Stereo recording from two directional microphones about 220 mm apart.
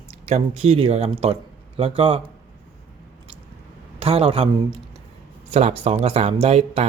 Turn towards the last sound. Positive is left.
turn(degrees=-30)  # may be behind; listen again after turning